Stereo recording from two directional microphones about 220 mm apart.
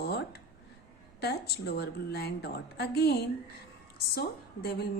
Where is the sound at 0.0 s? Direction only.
45° left (ahead or behind).